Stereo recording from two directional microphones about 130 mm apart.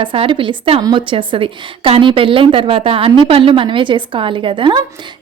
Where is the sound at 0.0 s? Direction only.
40° right (ahead or behind).